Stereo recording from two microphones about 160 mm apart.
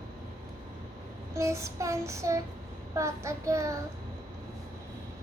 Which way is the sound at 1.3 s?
15° right (ahead or behind).